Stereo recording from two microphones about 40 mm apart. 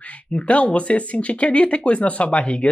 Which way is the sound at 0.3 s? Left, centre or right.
Left.